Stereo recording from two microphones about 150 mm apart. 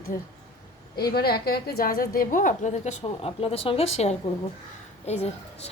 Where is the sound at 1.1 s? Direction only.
90° left; by 2.2 s 75° left (ahead or behind).